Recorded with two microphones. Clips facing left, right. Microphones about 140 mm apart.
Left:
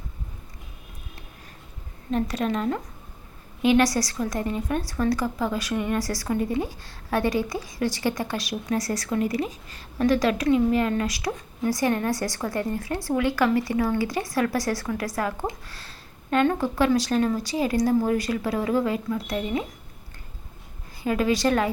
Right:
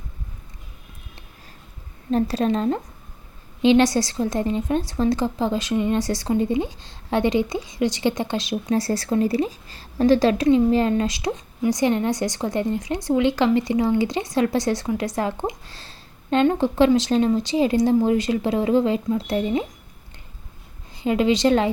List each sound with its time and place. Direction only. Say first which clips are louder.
2.0 s a woman's voice: right 5 dB; 30° right (ahead or behind)
21.0 s a woman's voice: right 4 dB; 20° right (ahead or behind)